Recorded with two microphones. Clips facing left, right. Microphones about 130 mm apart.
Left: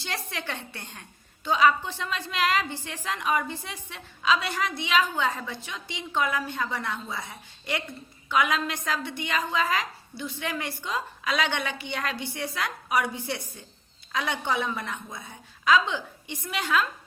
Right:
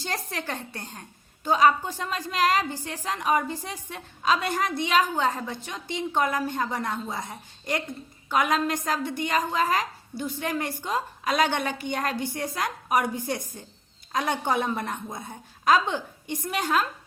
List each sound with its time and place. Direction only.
0.0 s a woman's voice: 40° right (ahead or behind)